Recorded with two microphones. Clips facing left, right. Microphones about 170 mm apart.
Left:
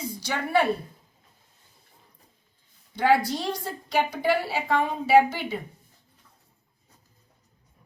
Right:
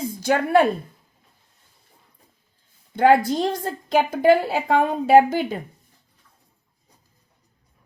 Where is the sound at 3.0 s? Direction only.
50° right (ahead or behind).